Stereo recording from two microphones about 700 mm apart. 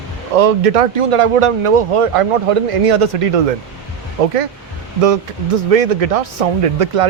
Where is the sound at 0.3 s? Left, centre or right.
Right.